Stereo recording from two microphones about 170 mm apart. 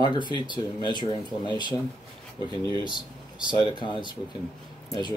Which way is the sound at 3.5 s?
25° left (ahead or behind).